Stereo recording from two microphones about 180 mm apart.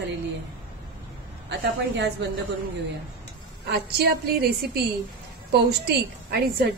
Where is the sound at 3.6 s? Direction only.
60° right (ahead or behind).